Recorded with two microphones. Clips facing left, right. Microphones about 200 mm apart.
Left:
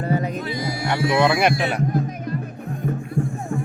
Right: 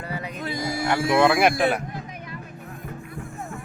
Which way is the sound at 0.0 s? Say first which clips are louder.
Left 9 dB; 45° left (ahead or behind).